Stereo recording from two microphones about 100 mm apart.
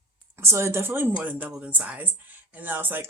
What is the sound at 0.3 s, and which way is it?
Speech, 30° right (ahead or behind).